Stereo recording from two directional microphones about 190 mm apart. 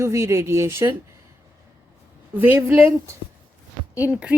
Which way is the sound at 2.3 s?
10° right (ahead or behind).